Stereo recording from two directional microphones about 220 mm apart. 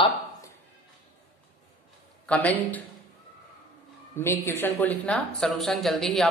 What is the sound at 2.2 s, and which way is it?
Speech, 5° left (ahead or behind).